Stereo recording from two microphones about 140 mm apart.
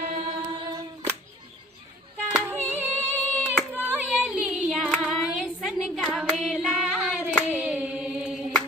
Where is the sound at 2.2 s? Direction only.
10° right (ahead or behind).